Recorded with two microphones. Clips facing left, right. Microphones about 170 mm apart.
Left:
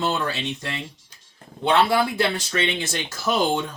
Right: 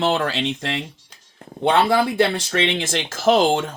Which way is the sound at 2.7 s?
90° right.